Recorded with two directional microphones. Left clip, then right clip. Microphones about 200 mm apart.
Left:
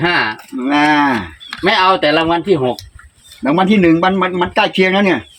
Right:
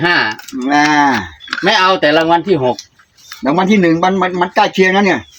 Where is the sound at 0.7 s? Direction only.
Centre (ahead or behind).